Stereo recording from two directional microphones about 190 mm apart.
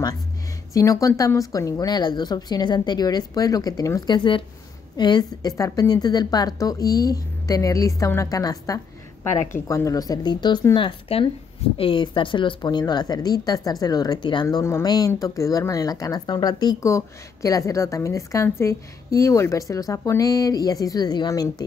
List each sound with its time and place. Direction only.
0.7 s a woman's voice: 20° left (ahead or behind)